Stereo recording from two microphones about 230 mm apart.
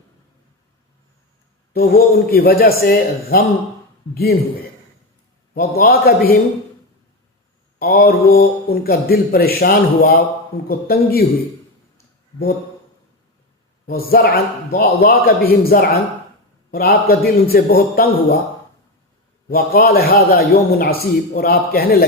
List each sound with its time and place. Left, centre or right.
1.7 s a man's voice: left
5.5 s speech: left
7.8 s speech: left
13.8 s a man's voice: left
19.5 s speech: left